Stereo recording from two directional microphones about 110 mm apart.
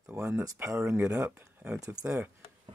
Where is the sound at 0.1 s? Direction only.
20° right (ahead or behind).